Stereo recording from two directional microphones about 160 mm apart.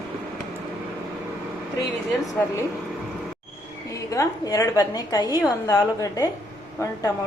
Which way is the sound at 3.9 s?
20° left (ahead or behind).